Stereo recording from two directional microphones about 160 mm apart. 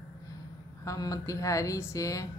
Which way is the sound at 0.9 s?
20° left (ahead or behind).